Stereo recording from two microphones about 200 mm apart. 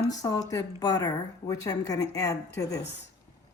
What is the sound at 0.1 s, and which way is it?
Speech, 20° left (ahead or behind).